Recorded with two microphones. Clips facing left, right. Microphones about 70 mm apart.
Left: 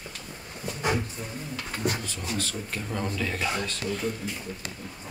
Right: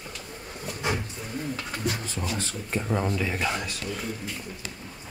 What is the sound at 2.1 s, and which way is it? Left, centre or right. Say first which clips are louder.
Speech: right 3 dB; right.